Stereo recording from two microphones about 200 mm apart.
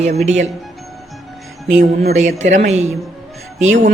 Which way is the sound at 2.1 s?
35° right (ahead or behind).